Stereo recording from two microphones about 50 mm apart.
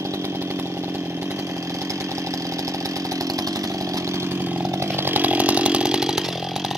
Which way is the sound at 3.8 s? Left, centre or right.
Right.